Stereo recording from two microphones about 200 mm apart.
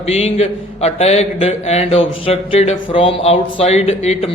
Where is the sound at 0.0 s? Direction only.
30° left (ahead or behind).